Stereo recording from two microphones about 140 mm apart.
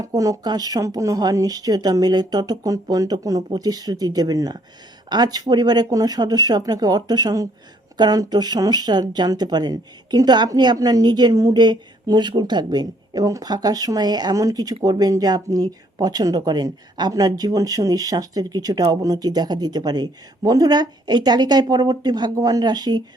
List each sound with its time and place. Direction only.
0.0 s a woman's voice: 25° right (ahead or behind)